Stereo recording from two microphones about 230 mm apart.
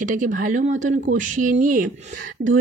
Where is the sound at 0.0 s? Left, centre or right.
Right.